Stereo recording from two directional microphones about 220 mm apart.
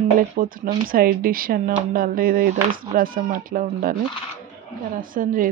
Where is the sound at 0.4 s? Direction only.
40° right (ahead or behind).